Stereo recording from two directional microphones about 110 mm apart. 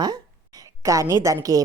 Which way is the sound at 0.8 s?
25° right (ahead or behind).